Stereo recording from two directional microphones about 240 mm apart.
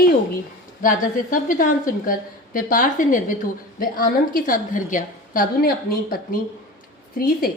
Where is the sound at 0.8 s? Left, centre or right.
Left.